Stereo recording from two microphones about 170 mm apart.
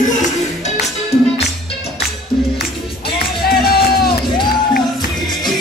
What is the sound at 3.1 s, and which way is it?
Music, 65° left (ahead or behind).